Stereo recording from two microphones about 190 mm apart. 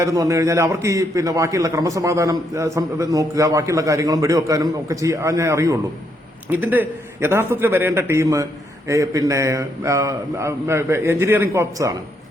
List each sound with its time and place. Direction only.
0.0 s a man's voice: 15° right (ahead or behind)